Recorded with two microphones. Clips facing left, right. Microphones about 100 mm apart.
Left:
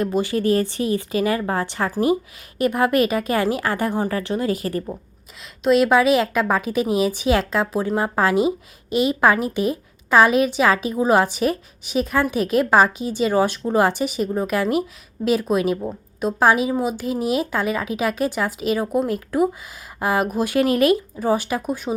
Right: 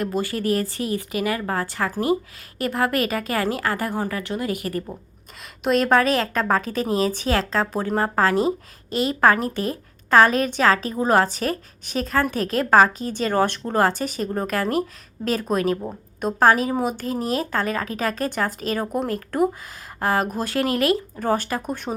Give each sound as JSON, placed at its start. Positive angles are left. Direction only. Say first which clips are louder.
{"t": 0.0, "sound": "a woman's voice", "louder": "left 4 dB", "side_deg": 20}
{"t": 5.4, "sound": "a woman's voice", "louder": "left 4 dB", "side_deg": 0}
{"t": 21.2, "sound": "a woman's voice", "louder": "left 2 dB", "side_deg": 10}